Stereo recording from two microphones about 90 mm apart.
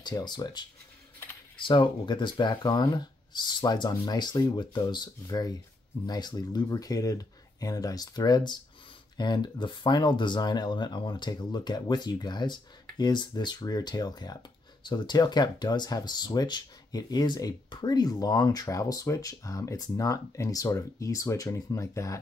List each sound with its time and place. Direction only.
0.0 s speech: 50° left (ahead or behind)
1.7 s speech: 60° left (ahead or behind); by 22.2 s 35° left (ahead or behind)